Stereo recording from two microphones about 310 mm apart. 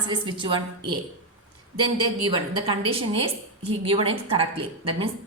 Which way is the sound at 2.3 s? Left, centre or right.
Centre.